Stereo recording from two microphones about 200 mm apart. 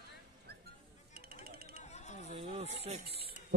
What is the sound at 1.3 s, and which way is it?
Music, 50° right (ahead or behind).